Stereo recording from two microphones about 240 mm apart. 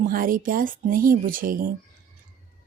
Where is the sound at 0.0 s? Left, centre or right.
Right.